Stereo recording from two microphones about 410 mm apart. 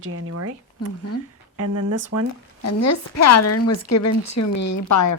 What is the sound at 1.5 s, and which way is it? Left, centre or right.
Speech, right.